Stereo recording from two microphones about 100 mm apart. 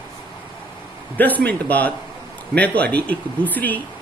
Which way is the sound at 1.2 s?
15° left (ahead or behind).